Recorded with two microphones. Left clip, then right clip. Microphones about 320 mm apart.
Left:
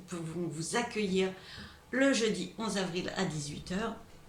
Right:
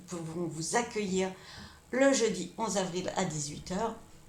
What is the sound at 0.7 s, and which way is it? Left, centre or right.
A woman's voice, centre.